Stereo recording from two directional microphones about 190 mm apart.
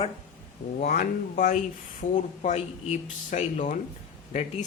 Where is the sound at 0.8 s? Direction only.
50° left (ahead or behind).